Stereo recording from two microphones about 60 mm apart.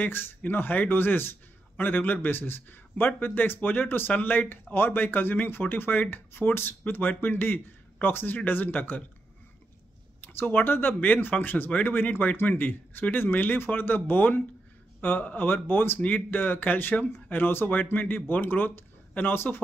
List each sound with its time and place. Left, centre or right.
0.0 s speech: left
10.2 s speech: left